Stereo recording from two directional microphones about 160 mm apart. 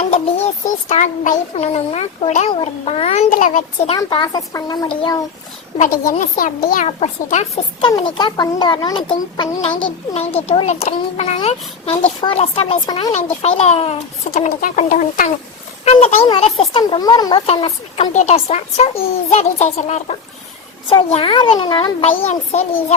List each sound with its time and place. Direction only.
0.0 s a child's voice: 40° left (ahead or behind)
3.9 s speech: 30° left (ahead or behind)
5.9 s speech: 60° left (ahead or behind)
6.8 s a child's voice: 45° left (ahead or behind)
7.8 s a child's voice: 25° left (ahead or behind)
13.4 s a child's voice: 40° left (ahead or behind); by 15.3 s 55° left (ahead or behind)
15.8 s a child's voice: 40° left (ahead or behind); by 17.4 s 25° left (ahead or behind)
17.4 s a child's voice: 40° left (ahead or behind)
20.9 s a child's voice: 35° left (ahead or behind)
22.2 s a child's voice: 40° left (ahead or behind)